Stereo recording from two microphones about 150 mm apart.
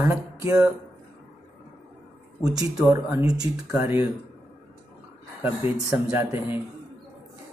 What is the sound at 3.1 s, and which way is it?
Speech, 25° right (ahead or behind).